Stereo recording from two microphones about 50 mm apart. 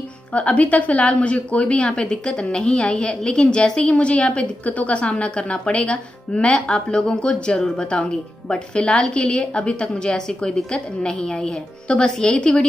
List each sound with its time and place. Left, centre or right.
0.3 s a woman's voice: left